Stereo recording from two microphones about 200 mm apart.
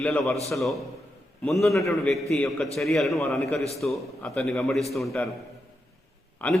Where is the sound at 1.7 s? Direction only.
15° left (ahead or behind).